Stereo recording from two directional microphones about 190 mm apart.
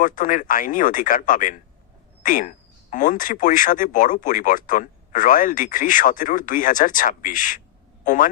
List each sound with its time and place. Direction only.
0.0 s speech: 45° left (ahead or behind)